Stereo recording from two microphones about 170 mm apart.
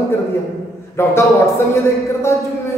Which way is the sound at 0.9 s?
15° left (ahead or behind).